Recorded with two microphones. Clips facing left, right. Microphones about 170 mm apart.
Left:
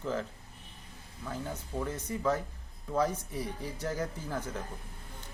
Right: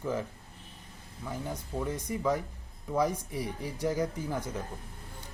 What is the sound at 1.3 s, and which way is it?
Speech, 10° right (ahead or behind).